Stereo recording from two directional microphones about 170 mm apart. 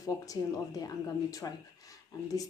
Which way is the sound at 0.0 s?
20° left (ahead or behind).